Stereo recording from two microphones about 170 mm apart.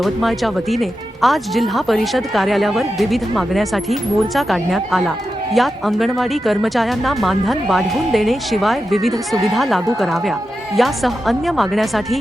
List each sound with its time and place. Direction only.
0.0 s speech: centre (ahead or behind)